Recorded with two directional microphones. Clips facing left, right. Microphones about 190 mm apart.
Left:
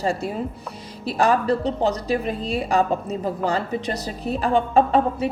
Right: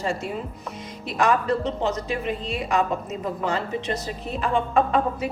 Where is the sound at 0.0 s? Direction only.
35° left (ahead or behind).